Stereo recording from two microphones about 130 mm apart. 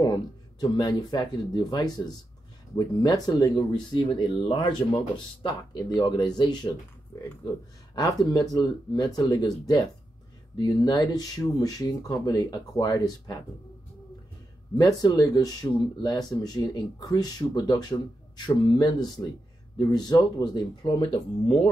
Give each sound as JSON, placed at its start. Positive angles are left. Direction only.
{"t": 0.0, "sound": "speech", "side_deg": 30}
{"t": 7.1, "sound": "speech", "side_deg": 20}
{"t": 14.8, "sound": "speech", "side_deg": 30}